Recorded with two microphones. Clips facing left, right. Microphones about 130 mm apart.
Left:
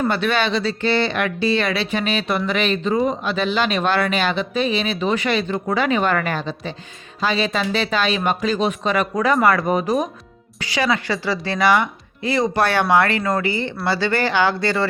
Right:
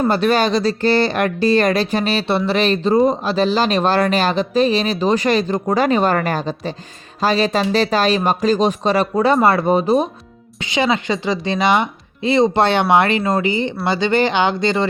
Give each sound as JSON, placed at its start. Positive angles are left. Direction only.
{"t": 0.1, "sound": "speech", "side_deg": -40}